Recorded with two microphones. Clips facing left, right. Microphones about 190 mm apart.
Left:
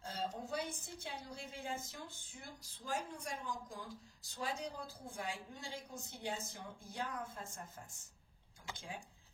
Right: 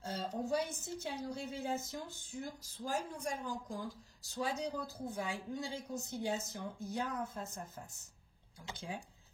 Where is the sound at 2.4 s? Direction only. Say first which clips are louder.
Right 10 dB; 40° right (ahead or behind).